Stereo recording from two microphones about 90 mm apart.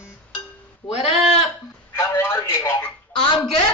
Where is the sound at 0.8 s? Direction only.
20° left (ahead or behind).